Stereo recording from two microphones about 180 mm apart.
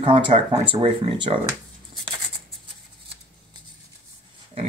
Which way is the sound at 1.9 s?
25° right (ahead or behind).